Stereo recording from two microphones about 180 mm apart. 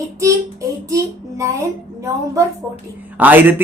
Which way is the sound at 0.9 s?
15° right (ahead or behind).